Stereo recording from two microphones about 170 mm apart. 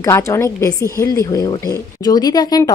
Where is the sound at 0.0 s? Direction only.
15° left (ahead or behind).